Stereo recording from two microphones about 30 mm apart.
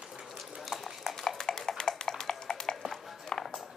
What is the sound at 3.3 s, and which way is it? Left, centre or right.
Music, centre.